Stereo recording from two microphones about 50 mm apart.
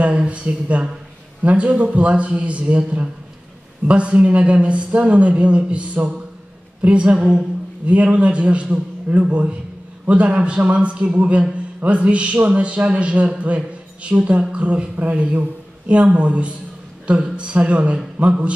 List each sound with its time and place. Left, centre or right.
0.0 s speech: right